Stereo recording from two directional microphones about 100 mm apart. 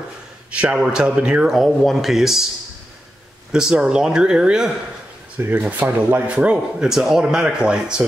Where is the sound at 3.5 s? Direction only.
5° right (ahead or behind).